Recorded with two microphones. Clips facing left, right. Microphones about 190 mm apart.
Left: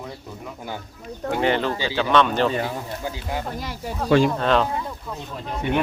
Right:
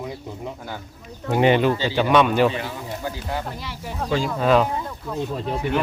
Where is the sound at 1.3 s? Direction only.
15° right (ahead or behind).